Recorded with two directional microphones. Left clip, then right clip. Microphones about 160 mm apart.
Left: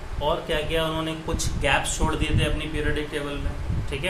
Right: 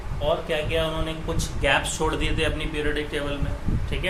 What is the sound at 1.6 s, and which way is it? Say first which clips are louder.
A man's voice: right 1 dB; centre (ahead or behind).